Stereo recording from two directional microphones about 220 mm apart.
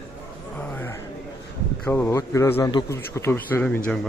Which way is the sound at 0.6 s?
10° left (ahead or behind).